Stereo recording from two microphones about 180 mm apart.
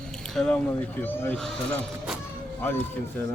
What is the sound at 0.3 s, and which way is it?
Speech, 5° left (ahead or behind).